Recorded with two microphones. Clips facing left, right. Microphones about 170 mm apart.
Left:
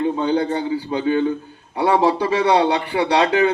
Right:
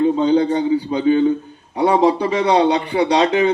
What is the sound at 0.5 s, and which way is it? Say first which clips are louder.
A man's voice: right 4 dB; 20° right (ahead or behind).